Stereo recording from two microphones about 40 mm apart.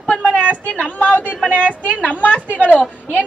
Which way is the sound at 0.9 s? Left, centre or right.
Left.